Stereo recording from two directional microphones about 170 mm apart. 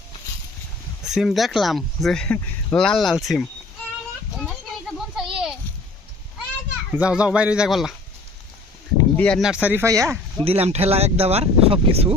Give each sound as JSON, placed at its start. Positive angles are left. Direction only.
{"t": 1.0, "sound": "speech", "side_deg": 0}
{"t": 4.4, "sound": "children playing", "side_deg": 0}
{"t": 6.9, "sound": "speech", "side_deg": -5}
{"t": 9.0, "sound": "a sound", "side_deg": 10}
{"t": 9.4, "sound": "speech", "side_deg": -5}
{"t": 10.4, "sound": "speech", "side_deg": -35}